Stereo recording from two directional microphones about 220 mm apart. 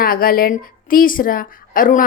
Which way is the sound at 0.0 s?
40° left (ahead or behind).